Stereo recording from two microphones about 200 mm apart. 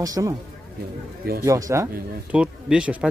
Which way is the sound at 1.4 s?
15° right (ahead or behind).